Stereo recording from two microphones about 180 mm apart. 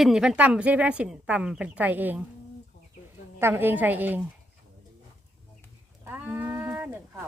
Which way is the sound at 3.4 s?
10° right (ahead or behind).